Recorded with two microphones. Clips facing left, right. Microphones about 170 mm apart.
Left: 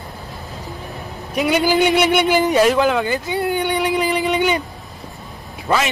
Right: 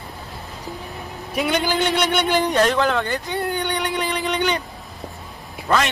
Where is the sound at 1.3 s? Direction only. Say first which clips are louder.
Left 5 dB; 5° left (ahead or behind).